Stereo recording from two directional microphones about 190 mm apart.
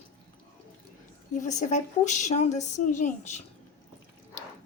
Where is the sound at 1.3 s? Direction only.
40° left (ahead or behind).